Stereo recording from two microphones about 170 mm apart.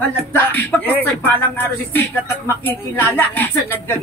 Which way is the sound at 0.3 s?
10° left (ahead or behind).